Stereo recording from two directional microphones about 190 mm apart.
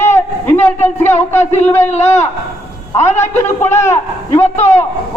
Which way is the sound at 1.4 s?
35° left (ahead or behind).